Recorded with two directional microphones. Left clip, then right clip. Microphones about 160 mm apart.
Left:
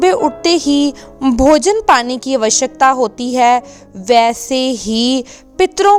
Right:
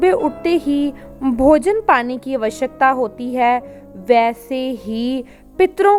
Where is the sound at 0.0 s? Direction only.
25° left (ahead or behind).